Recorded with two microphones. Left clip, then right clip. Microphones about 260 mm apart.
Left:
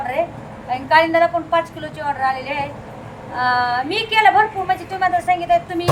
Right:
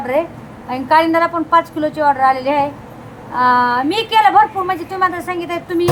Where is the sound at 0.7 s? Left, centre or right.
Centre.